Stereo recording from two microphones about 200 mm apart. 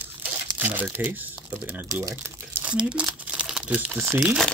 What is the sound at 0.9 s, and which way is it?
Speech, 10° right (ahead or behind).